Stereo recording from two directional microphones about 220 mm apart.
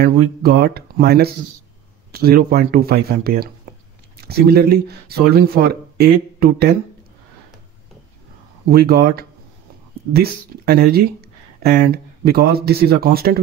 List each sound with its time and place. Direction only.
0.0 s speech: 45° right (ahead or behind)
8.6 s speech: 45° right (ahead or behind)